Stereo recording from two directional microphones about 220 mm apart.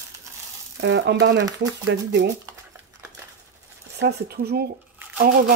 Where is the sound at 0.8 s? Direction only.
50° right (ahead or behind).